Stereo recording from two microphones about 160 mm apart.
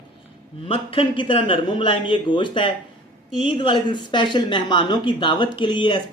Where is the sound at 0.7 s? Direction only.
35° left (ahead or behind).